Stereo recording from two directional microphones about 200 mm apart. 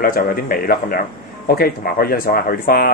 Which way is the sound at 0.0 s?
45° left (ahead or behind).